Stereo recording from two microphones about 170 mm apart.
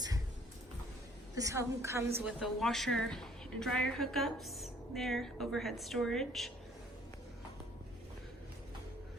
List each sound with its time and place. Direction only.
1.4 s a woman's voice: 20° right (ahead or behind)
2.2 s a woman's voice: centre (ahead or behind)